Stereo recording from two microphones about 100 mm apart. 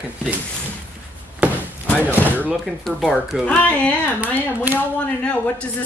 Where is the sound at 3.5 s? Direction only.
15° left (ahead or behind).